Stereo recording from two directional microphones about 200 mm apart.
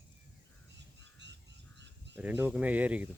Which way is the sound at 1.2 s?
60° right (ahead or behind).